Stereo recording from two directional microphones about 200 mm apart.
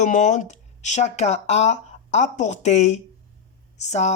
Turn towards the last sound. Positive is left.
turn(degrees=35)  # may be behind; listen again after turning